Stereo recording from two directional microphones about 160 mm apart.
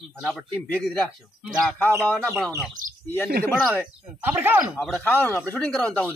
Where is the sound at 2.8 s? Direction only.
60° right (ahead or behind).